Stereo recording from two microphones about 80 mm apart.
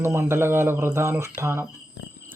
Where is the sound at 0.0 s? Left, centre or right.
Right.